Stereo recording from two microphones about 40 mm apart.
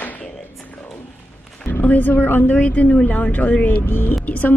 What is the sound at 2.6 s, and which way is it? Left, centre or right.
A woman's voice, left.